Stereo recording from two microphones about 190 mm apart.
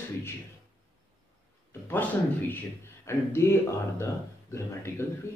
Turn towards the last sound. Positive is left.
turn(degrees=15)  # may be behind; listen again after turning